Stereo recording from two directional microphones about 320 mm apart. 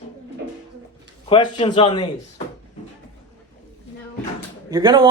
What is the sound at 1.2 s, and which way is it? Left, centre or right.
A man's voice, centre.